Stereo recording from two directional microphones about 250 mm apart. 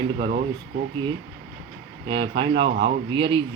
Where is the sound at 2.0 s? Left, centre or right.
Right.